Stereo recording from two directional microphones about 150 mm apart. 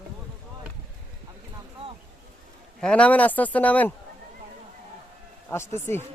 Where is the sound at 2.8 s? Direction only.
5° left (ahead or behind).